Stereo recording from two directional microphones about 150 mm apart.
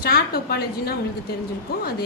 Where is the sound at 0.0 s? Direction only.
90° left.